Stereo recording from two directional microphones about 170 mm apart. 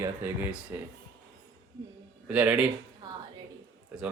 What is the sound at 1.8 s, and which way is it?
Speech, 25° right (ahead or behind).